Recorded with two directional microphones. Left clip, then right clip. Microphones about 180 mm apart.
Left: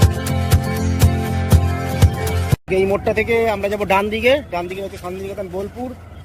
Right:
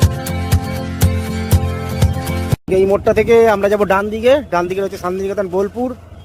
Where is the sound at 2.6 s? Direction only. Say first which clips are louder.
Right 5 dB; 25° right (ahead or behind).